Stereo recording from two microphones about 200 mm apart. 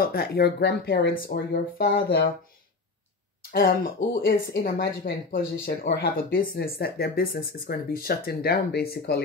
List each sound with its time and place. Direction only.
0.0 s speech: 50° left (ahead or behind)
3.5 s speech: 45° left (ahead or behind)